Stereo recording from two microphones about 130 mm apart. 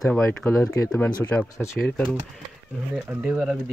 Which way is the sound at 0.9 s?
10° left (ahead or behind).